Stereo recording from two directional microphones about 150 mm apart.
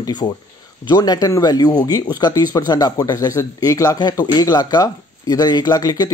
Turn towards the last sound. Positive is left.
turn(degrees=25)  # may be behind; listen again after turning